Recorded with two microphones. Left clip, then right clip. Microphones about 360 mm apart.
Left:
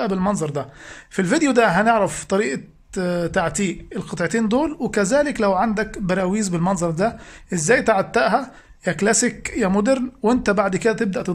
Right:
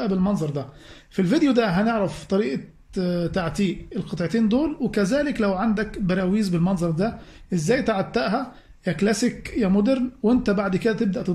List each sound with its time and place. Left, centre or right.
0.0 s speech: left